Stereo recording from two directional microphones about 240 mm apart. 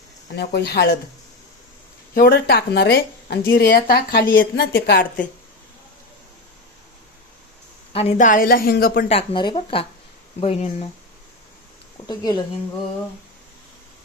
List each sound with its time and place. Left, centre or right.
0.3 s speech: left
2.1 s a woman's voice: left
7.9 s a woman's voice: left
9.1 s speech: centre
12.0 s speech: centre